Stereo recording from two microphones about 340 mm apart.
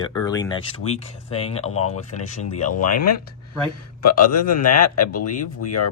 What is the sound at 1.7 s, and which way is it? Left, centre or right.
Speech, left.